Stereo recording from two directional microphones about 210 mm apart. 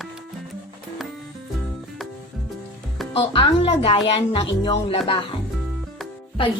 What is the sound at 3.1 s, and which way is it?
Speech, 25° left (ahead or behind).